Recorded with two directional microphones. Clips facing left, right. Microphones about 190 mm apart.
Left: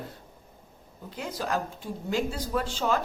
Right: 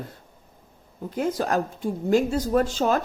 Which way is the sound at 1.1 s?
45° right (ahead or behind).